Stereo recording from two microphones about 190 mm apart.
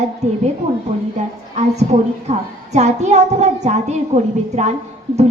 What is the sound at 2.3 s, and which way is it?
A woman's voice, 35° right (ahead or behind).